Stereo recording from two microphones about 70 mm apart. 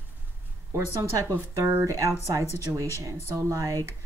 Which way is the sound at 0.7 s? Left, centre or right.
Right.